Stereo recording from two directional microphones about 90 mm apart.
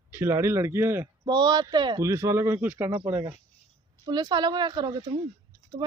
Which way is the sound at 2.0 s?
35° right (ahead or behind).